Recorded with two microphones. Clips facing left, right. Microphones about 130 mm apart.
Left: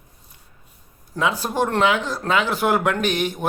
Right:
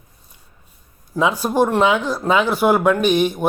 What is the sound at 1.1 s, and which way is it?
Speech, 15° right (ahead or behind).